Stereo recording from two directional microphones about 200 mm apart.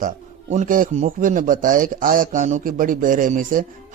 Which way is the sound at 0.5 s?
40° right (ahead or behind).